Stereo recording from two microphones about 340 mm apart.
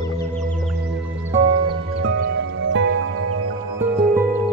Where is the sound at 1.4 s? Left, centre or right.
Right.